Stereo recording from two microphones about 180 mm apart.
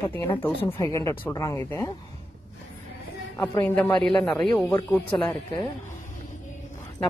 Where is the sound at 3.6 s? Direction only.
5° left (ahead or behind).